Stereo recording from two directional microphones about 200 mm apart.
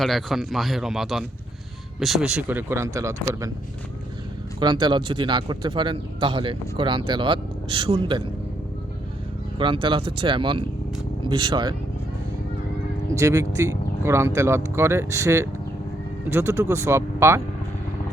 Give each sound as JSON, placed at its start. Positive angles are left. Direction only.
{"t": 0.0, "sound": "a man's voice", "side_deg": 0}
{"t": 4.6, "sound": "speech", "side_deg": -20}
{"t": 9.6, "sound": "speech", "side_deg": -25}
{"t": 13.1, "sound": "speech", "side_deg": -15}